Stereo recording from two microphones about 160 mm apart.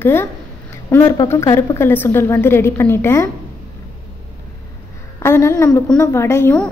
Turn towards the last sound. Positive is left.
turn(degrees=15)  # may be behind; listen again after turning